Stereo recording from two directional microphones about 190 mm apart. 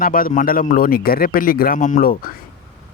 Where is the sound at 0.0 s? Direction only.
50° left (ahead or behind).